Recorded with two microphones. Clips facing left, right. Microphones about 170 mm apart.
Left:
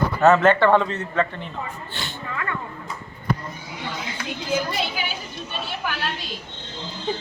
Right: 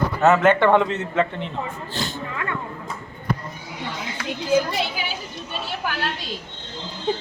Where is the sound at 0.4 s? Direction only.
20° right (ahead or behind).